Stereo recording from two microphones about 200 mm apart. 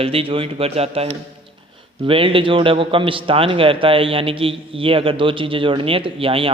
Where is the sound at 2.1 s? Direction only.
25° right (ahead or behind).